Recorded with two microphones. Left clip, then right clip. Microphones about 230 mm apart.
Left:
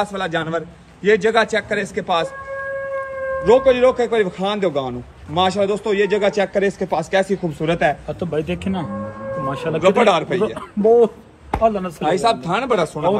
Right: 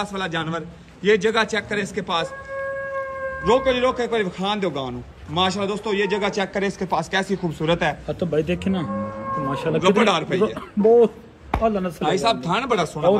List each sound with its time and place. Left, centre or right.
0.0 s a man's voice: centre
3.4 s a man's voice: centre
8.3 s a man's voice: centre
9.8 s a man's voice: centre
10.4 s a man's voice: centre
12.0 s a man's voice: centre